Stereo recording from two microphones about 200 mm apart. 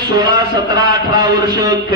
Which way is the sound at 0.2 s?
20° right (ahead or behind).